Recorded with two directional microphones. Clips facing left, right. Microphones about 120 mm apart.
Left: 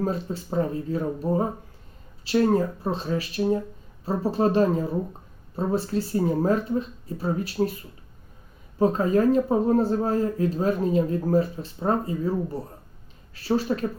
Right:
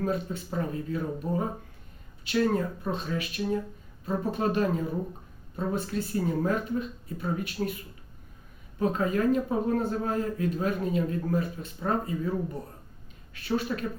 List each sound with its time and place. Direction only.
0.0 s speech: 35° left (ahead or behind)
8.8 s speech: 35° left (ahead or behind)